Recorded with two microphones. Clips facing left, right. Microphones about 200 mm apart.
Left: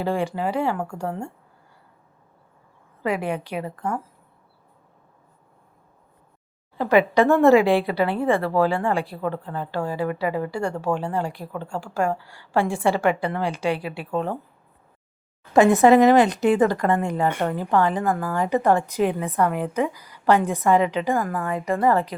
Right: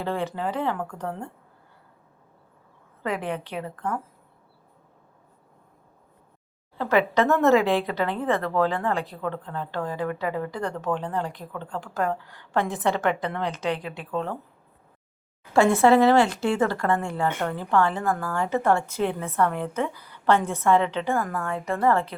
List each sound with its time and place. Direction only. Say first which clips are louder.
0.0 s a woman's voice: left 4 dB; 10° left (ahead or behind)
3.0 s a woman's voice: left 4 dB; 10° left (ahead or behind)
6.7 s a woman's voice: left 4 dB; 15° left (ahead or behind)
15.5 s a woman's voice: left 3 dB; 15° left (ahead or behind)